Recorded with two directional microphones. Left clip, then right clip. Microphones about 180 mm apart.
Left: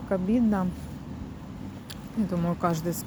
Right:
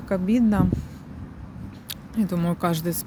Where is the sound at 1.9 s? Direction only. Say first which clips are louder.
Right 4 dB; 50° right (ahead or behind).